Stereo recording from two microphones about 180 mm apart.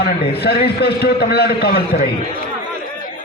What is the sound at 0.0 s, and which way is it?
A man's voice, 60° left (ahead or behind).